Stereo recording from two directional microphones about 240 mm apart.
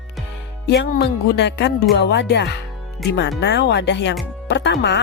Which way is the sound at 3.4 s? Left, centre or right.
Left.